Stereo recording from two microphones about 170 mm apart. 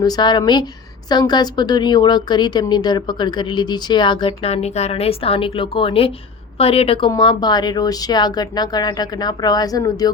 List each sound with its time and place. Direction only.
0.0 s a woman's voice: 25° left (ahead or behind)